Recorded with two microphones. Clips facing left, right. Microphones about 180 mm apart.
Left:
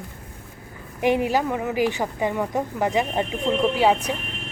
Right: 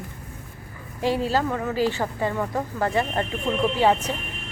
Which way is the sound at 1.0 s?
15° left (ahead or behind).